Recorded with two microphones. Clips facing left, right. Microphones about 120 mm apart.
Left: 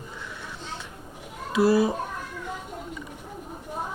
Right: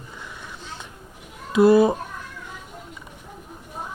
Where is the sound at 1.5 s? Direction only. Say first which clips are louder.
Right 6 dB; 20° right (ahead or behind).